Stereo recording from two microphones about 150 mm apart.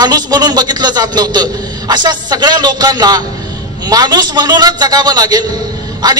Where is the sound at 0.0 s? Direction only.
25° right (ahead or behind).